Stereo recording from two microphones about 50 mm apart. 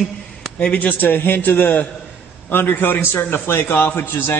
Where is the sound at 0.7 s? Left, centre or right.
Left.